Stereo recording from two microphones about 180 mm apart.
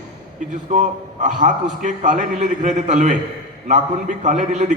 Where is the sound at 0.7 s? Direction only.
40° right (ahead or behind).